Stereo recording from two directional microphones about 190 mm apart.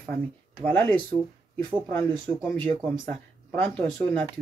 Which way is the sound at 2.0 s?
25° right (ahead or behind).